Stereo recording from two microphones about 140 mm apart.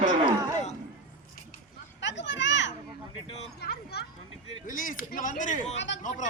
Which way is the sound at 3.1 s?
45° left (ahead or behind).